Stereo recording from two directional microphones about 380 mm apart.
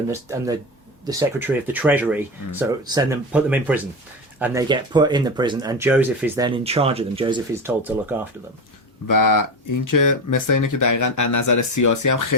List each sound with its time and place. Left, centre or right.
0.1 s speech: centre
9.0 s speech: left